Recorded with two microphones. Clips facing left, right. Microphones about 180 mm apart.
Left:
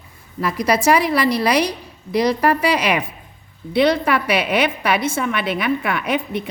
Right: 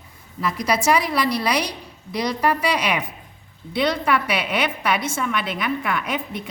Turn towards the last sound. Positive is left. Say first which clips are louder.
# left 4 dB
turn(degrees=60)  # may be behind; listen again after turning